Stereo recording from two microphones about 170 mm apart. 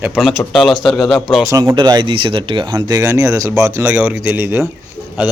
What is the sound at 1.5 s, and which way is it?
A man's voice, 20° right (ahead or behind).